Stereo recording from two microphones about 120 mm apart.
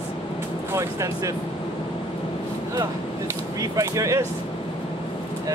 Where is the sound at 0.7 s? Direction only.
25° right (ahead or behind).